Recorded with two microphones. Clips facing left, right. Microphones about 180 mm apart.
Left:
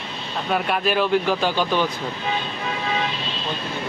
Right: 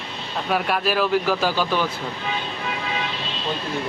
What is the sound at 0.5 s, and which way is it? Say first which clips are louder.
Speech: left 1 dB; centre (ahead or behind).